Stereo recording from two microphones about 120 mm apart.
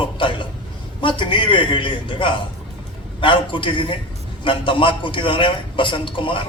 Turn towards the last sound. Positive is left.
turn(degrees=45)  # may be behind; listen again after turning